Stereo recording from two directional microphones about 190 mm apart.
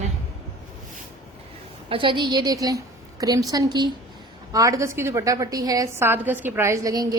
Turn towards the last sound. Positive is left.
turn(degrees=-20)  # may be behind; listen again after turning